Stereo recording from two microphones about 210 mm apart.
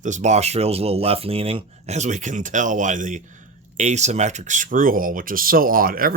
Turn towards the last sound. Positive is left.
turn(degrees=-45)  # may be behind; listen again after turning